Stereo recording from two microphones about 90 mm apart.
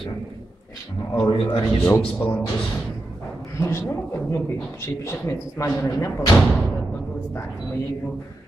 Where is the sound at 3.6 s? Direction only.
30° left (ahead or behind).